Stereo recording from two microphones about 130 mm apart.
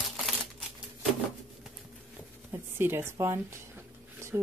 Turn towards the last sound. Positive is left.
turn(degrees=-20)  # may be behind; listen again after turning